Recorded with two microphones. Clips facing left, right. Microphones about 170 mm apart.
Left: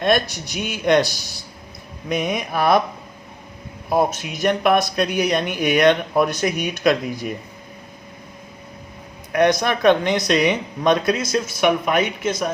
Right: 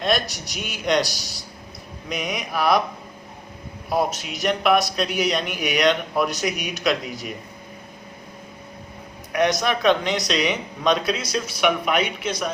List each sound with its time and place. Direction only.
0.0 s speech: 55° left (ahead or behind)
3.9 s speech: 50° left (ahead or behind)
9.5 s speech: 50° left (ahead or behind)